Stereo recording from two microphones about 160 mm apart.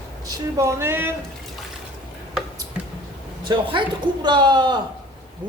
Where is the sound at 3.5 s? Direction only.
25° right (ahead or behind).